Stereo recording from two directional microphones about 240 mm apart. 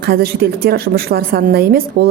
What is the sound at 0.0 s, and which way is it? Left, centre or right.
A woman's voice, right.